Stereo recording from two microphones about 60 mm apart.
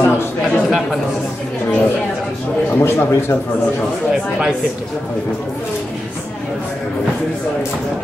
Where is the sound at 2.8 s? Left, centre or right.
Left.